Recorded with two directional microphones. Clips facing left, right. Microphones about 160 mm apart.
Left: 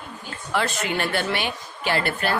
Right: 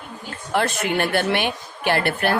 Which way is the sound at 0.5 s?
55° right (ahead or behind).